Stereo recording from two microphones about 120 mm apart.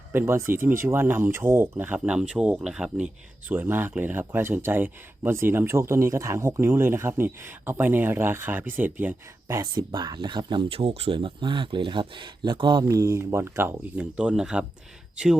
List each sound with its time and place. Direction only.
0.1 s speech: 20° right (ahead or behind)
9.6 s speech: 35° right (ahead or behind)
12.9 s speech: 25° right (ahead or behind); by 15.4 s 5° right (ahead or behind)